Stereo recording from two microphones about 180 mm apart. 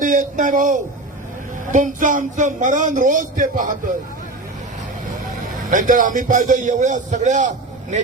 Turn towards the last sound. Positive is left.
turn(degrees=-45)  # may be behind; listen again after turning